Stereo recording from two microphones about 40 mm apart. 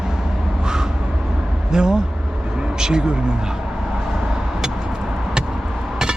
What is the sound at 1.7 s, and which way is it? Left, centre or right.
Speech, centre.